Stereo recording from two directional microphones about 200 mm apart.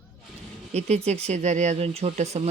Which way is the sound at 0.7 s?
30° right (ahead or behind).